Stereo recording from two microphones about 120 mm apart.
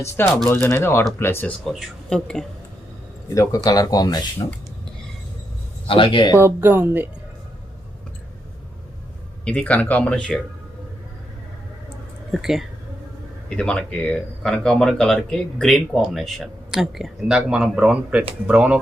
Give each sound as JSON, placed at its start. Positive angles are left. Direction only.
{"t": 0.0, "sound": "speech", "side_deg": 20}
{"t": 1.6, "sound": "speech", "side_deg": 0}
{"t": 3.3, "sound": "speech", "side_deg": 25}
{"t": 5.9, "sound": "speech", "side_deg": 45}
{"t": 6.3, "sound": "speech", "side_deg": -20}
{"t": 9.4, "sound": "speech", "side_deg": 10}
{"t": 12.3, "sound": "speech", "side_deg": -5}
{"t": 13.5, "sound": "speech", "side_deg": 10}